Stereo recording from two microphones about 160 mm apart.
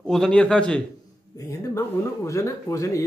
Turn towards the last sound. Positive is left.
turn(degrees=20)  # may be behind; listen again after turning